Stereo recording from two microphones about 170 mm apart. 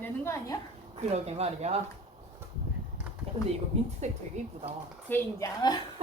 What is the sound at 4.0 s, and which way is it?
Speech, 40° right (ahead or behind).